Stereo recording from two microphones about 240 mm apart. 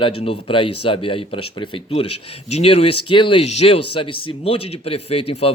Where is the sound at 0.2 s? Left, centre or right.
Left.